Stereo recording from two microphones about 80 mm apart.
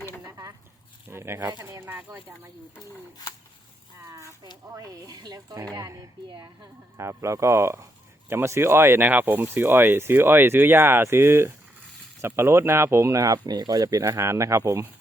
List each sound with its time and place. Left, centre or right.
0.3 s a sound: right
1.1 s speech: right
4.0 s a sound: right
4.8 s speech: right
13.4 s speech: right
14.0 s speech: right